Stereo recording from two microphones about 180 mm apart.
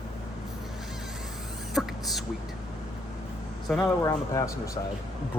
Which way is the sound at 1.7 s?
Centre (ahead or behind).